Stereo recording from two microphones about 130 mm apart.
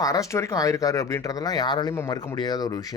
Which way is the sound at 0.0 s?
25° left (ahead or behind).